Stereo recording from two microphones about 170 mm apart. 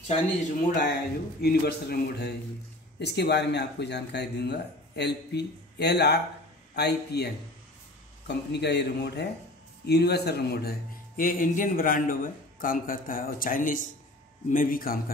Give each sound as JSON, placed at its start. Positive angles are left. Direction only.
{"t": 0.1, "sound": "speech", "side_deg": 50}
{"t": 1.4, "sound": "a man's voice", "side_deg": 70}
{"t": 3.0, "sound": "a man's voice", "side_deg": 80}
{"t": 8.3, "sound": "a man's voice", "side_deg": 80}